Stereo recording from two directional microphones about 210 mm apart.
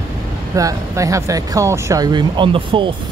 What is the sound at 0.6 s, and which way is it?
Speech, 15° right (ahead or behind).